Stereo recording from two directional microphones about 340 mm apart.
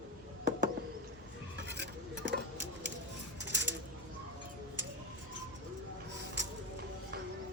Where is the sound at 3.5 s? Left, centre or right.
Right.